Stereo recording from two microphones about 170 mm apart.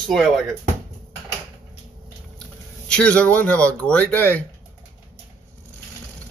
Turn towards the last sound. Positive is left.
turn(degrees=10)  # may be behind; listen again after turning